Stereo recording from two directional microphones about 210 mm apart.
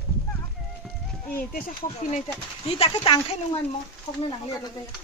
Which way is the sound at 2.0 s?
40° left (ahead or behind).